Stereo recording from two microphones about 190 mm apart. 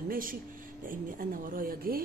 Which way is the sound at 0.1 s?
45° right (ahead or behind).